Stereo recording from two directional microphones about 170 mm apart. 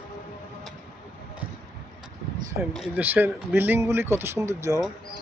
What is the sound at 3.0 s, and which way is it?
Speech, 10° right (ahead or behind).